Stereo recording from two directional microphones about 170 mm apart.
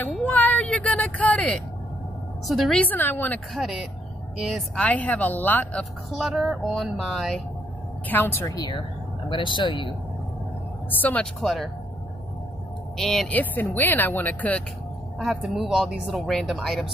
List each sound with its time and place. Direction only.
0.0 s a sound: 10° left (ahead or behind)
2.4 s speech: centre (ahead or behind)
3.5 s a woman's voice: centre (ahead or behind)
8.1 s speech: 15° left (ahead or behind); by 9.9 s 30° left (ahead or behind)
11.0 s a woman's voice: 10° left (ahead or behind)
12.9 s speech: centre (ahead or behind)
15.1 s a woman's voice: centre (ahead or behind)